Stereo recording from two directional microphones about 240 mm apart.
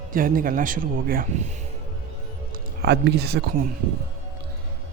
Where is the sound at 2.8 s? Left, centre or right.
Right.